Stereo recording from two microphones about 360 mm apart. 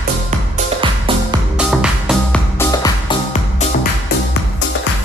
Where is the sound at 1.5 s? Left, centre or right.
Centre.